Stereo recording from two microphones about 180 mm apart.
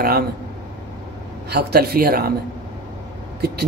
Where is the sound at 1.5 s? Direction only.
60° right (ahead or behind).